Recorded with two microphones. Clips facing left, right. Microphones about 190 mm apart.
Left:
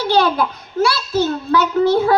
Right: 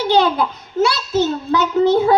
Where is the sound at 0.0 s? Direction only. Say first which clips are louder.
Right 1 dB; 20° right (ahead or behind).